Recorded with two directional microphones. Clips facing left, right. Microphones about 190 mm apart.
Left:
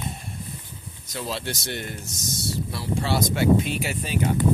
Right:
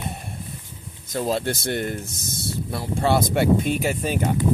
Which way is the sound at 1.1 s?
50° right (ahead or behind).